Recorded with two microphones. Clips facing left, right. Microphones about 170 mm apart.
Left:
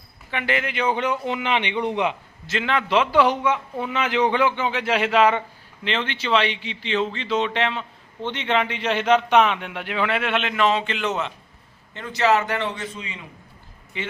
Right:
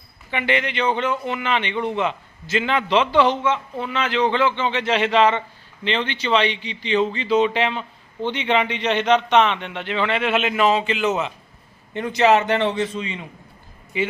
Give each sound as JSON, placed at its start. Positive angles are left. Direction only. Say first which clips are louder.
{"t": 0.3, "sound": "a man's voice", "louder": "right 3 dB", "side_deg": 0}
{"t": 2.5, "sound": "a man's voice", "louder": "right 2 dB", "side_deg": 0}
{"t": 11.9, "sound": "a man's voice", "louder": "right 4 dB", "side_deg": -15}
{"t": 13.9, "sound": "speech", "louder": "right 8 dB", "side_deg": -10}